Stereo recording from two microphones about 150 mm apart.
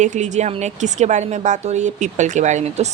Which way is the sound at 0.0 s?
55° right (ahead or behind).